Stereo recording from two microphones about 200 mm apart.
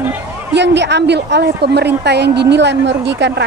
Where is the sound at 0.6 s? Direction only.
60° right (ahead or behind).